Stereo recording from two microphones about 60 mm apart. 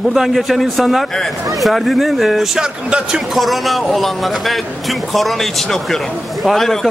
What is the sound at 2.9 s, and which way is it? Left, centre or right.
Speech, centre.